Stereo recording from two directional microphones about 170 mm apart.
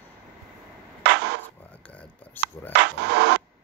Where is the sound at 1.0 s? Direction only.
75° right (ahead or behind).